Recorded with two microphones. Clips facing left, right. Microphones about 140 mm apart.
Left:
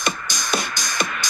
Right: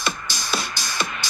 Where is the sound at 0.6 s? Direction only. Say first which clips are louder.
Left 2 dB; 50° left (ahead or behind).